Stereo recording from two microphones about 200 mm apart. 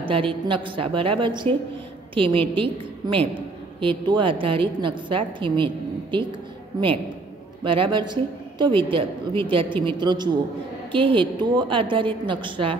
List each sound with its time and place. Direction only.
0.1 s a woman's voice: 25° right (ahead or behind)
7.6 s a woman's voice: 25° right (ahead or behind)